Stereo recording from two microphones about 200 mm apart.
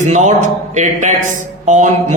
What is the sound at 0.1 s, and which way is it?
A man's voice, 35° right (ahead or behind).